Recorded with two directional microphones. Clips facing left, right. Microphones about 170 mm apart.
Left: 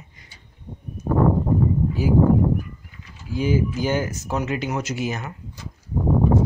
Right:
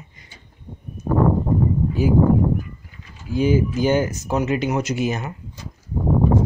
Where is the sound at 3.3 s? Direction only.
20° right (ahead or behind).